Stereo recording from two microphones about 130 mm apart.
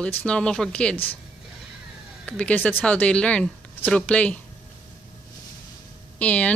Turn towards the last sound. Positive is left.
turn(degrees=10)  # may be behind; listen again after turning